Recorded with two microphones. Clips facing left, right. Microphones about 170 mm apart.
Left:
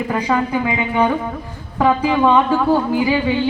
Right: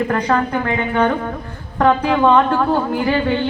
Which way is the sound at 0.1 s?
5° left (ahead or behind).